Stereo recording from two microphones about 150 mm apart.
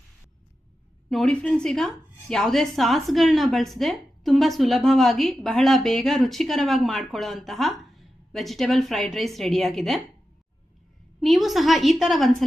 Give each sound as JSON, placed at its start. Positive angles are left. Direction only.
{"t": 1.1, "sound": "a woman's voice", "side_deg": 5}
{"t": 11.2, "sound": "a woman's voice", "side_deg": 0}